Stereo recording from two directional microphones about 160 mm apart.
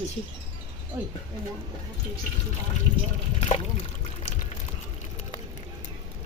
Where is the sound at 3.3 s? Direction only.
40° left (ahead or behind).